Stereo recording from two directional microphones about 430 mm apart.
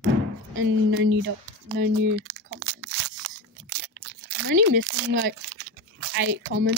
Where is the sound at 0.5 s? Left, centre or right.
Right.